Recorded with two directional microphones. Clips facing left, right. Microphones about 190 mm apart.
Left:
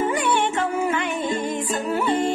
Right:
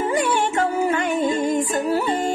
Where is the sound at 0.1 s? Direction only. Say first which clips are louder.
Right 1 dB; 40° right (ahead or behind).